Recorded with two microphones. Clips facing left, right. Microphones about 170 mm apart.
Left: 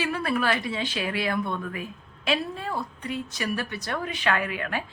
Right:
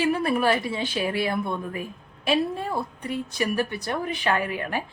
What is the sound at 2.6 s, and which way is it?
Speech, 40° right (ahead or behind).